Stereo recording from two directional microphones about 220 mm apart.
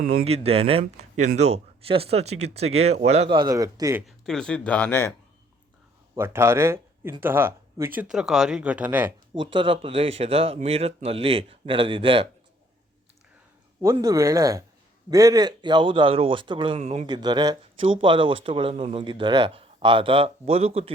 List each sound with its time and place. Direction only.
0.3 s speech: 25° right (ahead or behind)
4.0 s speech: centre (ahead or behind)
6.1 s speech: 10° right (ahead or behind)
9.3 s speech: 20° right (ahead or behind)
13.8 s speech: 15° right (ahead or behind)